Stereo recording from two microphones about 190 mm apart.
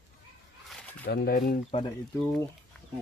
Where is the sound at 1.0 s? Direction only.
55° left (ahead or behind).